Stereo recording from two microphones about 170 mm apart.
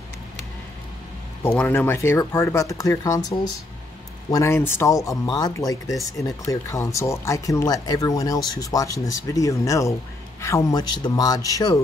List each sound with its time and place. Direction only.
1.4 s speech: 10° left (ahead or behind)